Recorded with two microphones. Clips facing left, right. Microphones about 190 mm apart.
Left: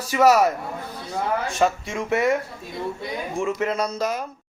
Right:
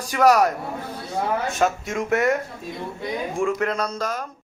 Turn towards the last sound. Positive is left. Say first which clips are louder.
# left 1 dB
turn(degrees=10)  # may be behind; listen again after turning